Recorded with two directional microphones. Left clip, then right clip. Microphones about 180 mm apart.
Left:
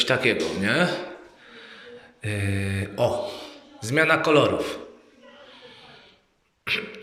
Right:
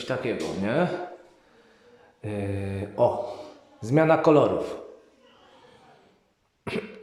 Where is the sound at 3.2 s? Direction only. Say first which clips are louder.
Left 2 dB; 35° right (ahead or behind).